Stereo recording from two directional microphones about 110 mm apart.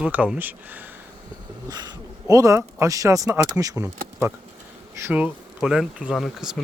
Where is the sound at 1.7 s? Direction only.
35° right (ahead or behind); by 5.3 s 20° right (ahead or behind).